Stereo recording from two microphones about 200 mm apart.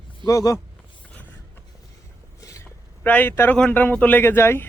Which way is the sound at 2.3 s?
15° left (ahead or behind).